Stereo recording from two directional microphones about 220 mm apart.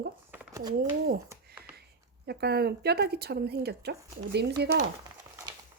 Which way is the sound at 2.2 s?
45° right (ahead or behind).